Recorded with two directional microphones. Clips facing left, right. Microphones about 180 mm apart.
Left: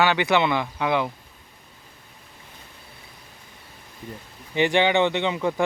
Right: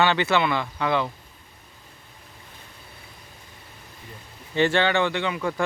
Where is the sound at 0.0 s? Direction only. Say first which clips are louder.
Left 1 dB; 10° left (ahead or behind).